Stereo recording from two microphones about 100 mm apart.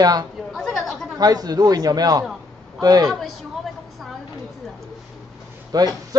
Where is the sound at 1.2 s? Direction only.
40° right (ahead or behind).